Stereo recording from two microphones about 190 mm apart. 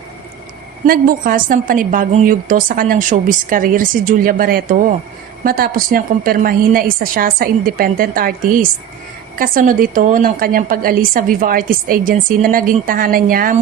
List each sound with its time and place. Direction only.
0.9 s a woman's voice: 50° right (ahead or behind)